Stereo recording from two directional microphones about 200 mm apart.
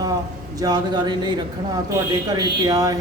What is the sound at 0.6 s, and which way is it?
Speech, 20° right (ahead or behind).